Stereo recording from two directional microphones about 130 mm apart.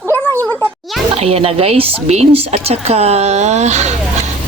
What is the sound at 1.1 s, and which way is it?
A woman's voice, 50° right (ahead or behind).